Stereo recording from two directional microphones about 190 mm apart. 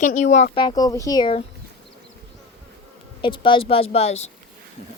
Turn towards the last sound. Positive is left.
turn(degrees=35)  # may be behind; listen again after turning